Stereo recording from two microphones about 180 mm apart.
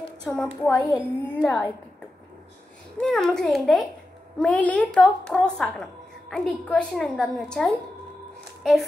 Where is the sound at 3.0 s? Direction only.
5° left (ahead or behind).